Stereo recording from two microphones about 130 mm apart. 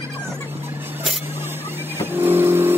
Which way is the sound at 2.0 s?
15° right (ahead or behind).